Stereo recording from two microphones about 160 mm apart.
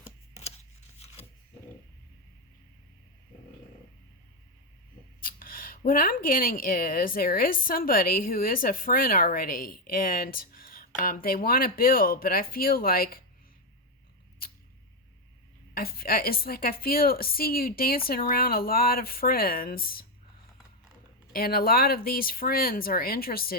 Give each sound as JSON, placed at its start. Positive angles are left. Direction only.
{"t": 0.9, "sound": "a sound", "side_deg": 40}
{"t": 5.2, "sound": "speech", "side_deg": 60}
{"t": 15.7, "sound": "a woman's voice", "side_deg": 70}
{"t": 21.3, "sound": "a woman's voice", "side_deg": 70}